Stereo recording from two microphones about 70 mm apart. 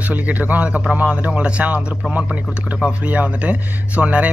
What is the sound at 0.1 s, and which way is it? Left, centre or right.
Speech, right.